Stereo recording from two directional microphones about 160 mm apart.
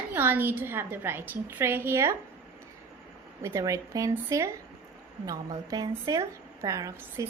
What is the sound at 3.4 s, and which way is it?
A woman's voice, 20° right (ahead or behind).